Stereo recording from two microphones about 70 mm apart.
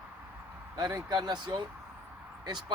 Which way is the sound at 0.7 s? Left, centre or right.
Right.